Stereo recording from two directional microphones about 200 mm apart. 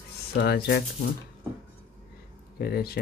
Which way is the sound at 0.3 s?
50° left (ahead or behind).